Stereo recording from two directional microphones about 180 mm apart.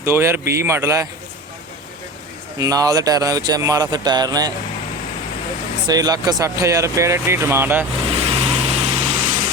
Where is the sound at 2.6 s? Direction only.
20° right (ahead or behind).